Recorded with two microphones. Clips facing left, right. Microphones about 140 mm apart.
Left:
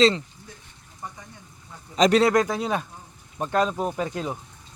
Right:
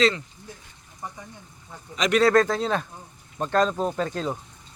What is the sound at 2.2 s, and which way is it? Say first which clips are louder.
Speech: right 2 dB; 15° left (ahead or behind).